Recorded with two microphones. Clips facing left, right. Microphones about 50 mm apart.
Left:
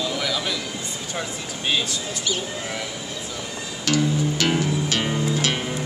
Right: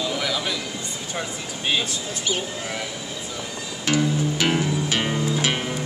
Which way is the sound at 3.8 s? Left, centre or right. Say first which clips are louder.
Even; centre.